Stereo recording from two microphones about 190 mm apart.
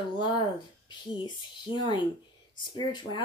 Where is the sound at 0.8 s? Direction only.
25° left (ahead or behind).